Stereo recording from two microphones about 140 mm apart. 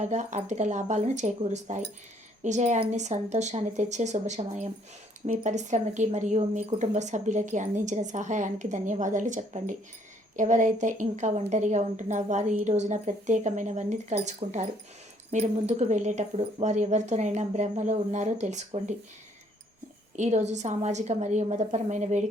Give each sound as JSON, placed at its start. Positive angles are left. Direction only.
{"t": 0.0, "sound": "a woman's voice", "side_deg": -55}
{"t": 14.4, "sound": "a woman's voice", "side_deg": -45}
{"t": 20.1, "sound": "a woman's voice", "side_deg": -55}